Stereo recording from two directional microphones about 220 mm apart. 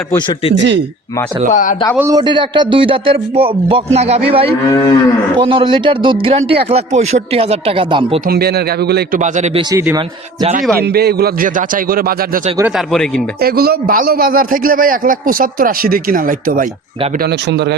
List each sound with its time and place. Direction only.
1.5 s speech: 35° left (ahead or behind)
2.0 s a man's voice: 15° right (ahead or behind)
4.7 s moo: 15° left (ahead or behind)
5.4 s a man's voice: 25° right (ahead or behind)
8.3 s a man's voice: 45° right (ahead or behind)
9.2 s a man's voice: 30° right (ahead or behind)
9.7 s a man's voice: 10° right (ahead or behind)
10.4 s a man's voice: 40° right (ahead or behind)
12.5 s a man's voice: 10° right (ahead or behind)
12.9 s speech: 5° left (ahead or behind)
13.4 s a man's voice: 45° right (ahead or behind)
17.5 s a man's voice: 50° right (ahead or behind)